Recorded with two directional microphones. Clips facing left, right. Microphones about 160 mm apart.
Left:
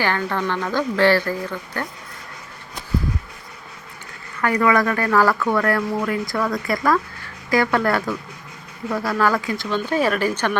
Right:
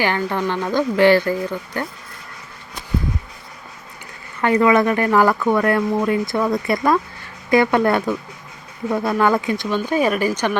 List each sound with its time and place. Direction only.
0.0 s speech: 15° right (ahead or behind)
4.4 s speech: 25° right (ahead or behind)